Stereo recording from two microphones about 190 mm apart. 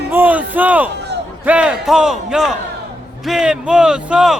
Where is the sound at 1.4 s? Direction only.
5° right (ahead or behind).